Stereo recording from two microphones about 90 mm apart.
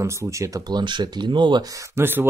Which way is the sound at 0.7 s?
55° right (ahead or behind).